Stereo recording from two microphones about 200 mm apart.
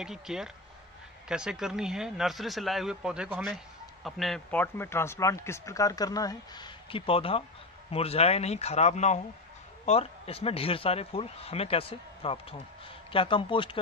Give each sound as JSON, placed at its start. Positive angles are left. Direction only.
{"t": 0.0, "sound": "a man's voice", "side_deg": 0}